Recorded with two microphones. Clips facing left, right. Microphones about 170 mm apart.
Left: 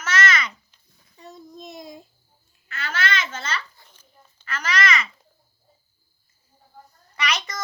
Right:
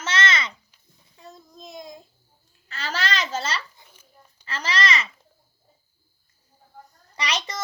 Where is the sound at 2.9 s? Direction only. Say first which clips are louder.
Even; 35° right (ahead or behind).